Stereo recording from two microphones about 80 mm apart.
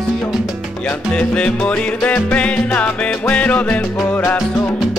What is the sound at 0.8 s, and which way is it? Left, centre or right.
Music, centre.